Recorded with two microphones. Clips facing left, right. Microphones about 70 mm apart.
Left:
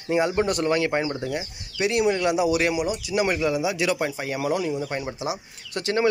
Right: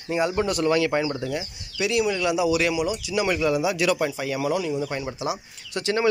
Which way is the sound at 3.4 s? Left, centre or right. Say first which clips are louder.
Right 1 dB; left.